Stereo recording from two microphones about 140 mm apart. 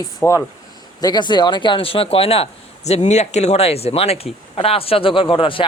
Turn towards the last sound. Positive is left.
turn(degrees=40)  # may be behind; listen again after turning